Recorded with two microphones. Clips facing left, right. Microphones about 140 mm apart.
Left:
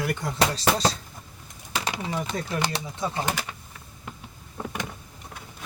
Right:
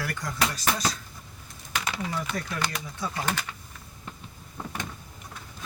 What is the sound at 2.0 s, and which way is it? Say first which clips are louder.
Speech: left 2 dB; 25° left (ahead or behind).